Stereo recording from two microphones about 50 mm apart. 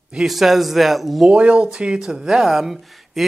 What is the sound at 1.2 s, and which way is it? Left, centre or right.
Speech, right.